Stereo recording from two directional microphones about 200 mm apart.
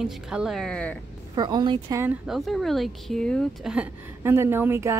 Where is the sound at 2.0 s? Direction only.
5° right (ahead or behind).